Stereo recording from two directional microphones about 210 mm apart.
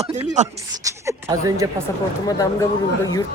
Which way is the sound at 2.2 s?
15° left (ahead or behind).